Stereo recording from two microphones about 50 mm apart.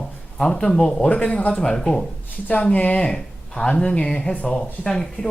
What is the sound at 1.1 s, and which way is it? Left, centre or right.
Speech, left.